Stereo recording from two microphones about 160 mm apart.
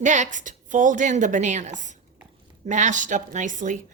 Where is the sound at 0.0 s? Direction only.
50° right (ahead or behind).